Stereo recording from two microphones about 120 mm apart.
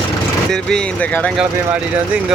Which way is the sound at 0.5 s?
10° left (ahead or behind).